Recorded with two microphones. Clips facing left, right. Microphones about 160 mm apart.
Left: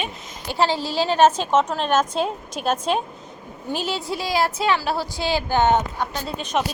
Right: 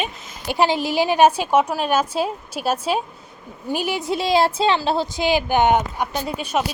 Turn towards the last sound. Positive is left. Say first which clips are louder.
# right 2 dB
turn(degrees=-10)  # may be behind; listen again after turning